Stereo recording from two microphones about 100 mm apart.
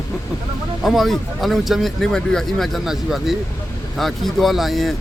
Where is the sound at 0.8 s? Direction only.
Centre (ahead or behind).